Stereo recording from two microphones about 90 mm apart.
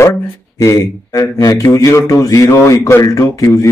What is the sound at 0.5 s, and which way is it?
Mantra, 35° left (ahead or behind).